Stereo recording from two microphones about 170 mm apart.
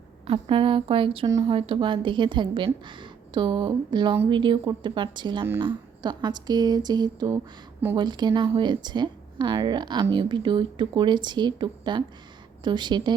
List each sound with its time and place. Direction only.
0.3 s a woman's voice: 30° right (ahead or behind)